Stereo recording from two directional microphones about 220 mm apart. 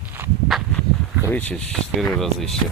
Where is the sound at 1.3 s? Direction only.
5° left (ahead or behind).